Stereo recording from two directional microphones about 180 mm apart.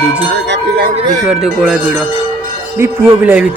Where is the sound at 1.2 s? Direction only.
5° right (ahead or behind).